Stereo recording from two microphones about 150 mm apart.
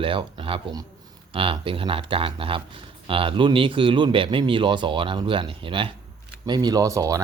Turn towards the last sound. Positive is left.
turn(degrees=-20)  # may be behind; listen again after turning